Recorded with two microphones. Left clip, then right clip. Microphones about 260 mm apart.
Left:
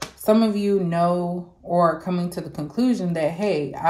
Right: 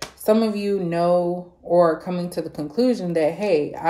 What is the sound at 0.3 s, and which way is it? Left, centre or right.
Speech, centre.